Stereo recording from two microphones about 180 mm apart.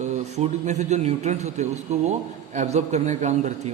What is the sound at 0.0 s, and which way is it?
A man's voice, 40° right (ahead or behind).